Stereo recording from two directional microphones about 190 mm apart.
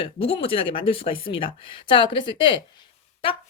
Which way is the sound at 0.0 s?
30° left (ahead or behind).